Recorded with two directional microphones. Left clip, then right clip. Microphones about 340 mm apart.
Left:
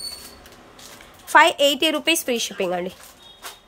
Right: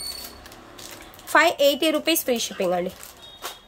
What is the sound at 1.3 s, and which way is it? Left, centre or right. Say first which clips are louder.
A woman's voice: left 3 dB; centre.